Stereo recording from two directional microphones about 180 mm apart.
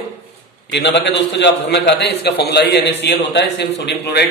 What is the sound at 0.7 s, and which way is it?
A man's voice, 75° left (ahead or behind).